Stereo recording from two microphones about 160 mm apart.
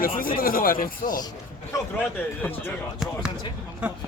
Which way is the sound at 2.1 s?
15° left (ahead or behind).